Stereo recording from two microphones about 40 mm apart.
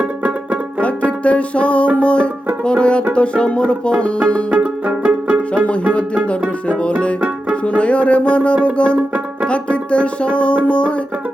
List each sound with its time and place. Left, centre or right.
0.0 s music: right
1.2 s music: left
2.0 s speech: left
2.6 s music: left
3.1 s speech: left
4.5 s music: right
7.8 s music: left
8.6 s speech: left
10.7 s music: left